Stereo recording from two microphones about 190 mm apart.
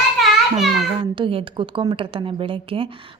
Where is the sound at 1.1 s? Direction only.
25° right (ahead or behind).